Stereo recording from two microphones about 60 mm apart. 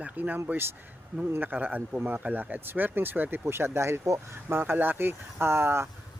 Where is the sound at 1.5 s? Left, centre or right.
Right.